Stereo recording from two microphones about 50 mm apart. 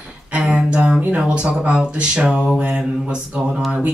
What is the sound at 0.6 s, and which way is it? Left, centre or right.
Mantra, right.